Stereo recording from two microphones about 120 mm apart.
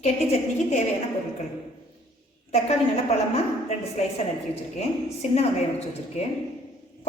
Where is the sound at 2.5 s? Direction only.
60° left (ahead or behind).